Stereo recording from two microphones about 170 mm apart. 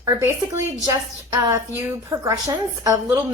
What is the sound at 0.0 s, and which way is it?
A woman's voice, 20° right (ahead or behind).